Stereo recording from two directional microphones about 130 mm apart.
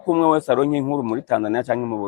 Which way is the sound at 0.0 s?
20° left (ahead or behind).